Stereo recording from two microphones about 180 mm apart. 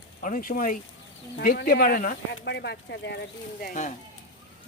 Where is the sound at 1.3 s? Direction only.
65° left (ahead or behind).